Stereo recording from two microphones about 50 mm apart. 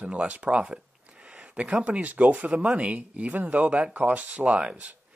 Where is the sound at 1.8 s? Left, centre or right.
Right.